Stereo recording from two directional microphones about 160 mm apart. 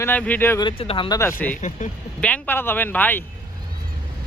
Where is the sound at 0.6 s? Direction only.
35° left (ahead or behind).